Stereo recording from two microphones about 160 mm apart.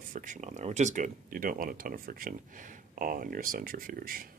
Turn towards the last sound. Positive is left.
turn(degrees=-65)  # may be behind; listen again after turning